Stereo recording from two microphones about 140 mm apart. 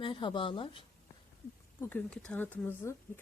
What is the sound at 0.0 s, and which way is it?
Speech, 35° left (ahead or behind).